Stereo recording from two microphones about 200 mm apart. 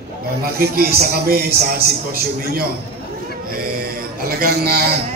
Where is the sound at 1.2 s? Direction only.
50° right (ahead or behind).